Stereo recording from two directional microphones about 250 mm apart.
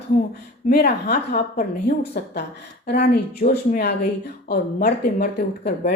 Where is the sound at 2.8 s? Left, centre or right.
Left.